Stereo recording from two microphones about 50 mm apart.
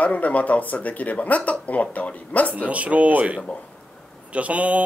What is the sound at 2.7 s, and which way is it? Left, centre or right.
Speech, right.